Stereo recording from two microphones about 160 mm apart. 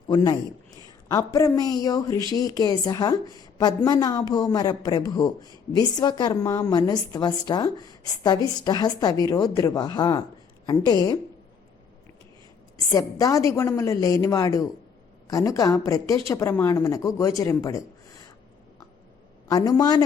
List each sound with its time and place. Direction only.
0.8 s a woman's voice: 20° left (ahead or behind)
12.9 s a woman's voice: 20° left (ahead or behind)
19.5 s a man's voice: 25° left (ahead or behind)